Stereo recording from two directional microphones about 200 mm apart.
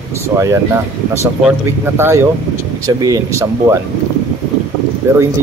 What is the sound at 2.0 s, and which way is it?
Speech, 10° right (ahead or behind).